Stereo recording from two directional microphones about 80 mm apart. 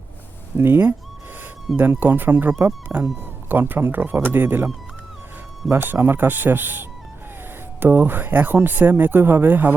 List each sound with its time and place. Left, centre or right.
0.5 s speech: right
5.7 s speech: right